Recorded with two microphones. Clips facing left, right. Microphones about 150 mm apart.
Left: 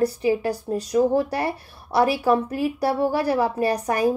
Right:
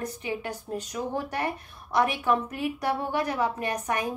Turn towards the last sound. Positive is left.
turn(degrees=35)  # may be behind; listen again after turning